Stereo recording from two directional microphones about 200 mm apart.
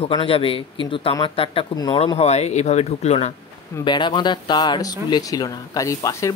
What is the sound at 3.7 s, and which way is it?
Speech, 20° left (ahead or behind).